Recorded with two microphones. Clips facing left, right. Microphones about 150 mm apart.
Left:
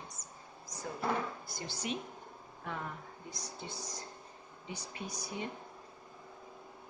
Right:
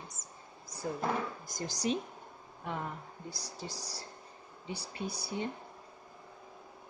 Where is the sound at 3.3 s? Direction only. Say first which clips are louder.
Right 2 dB; 35° right (ahead or behind).